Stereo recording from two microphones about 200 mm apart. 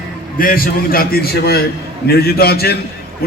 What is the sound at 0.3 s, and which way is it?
A man's voice, 45° left (ahead or behind).